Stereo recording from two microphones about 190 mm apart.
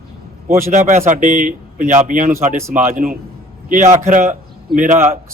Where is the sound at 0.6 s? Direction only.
40° right (ahead or behind).